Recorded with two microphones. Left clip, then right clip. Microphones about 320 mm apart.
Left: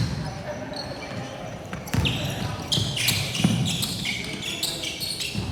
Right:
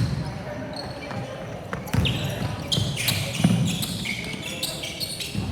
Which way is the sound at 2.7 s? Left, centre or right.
Centre.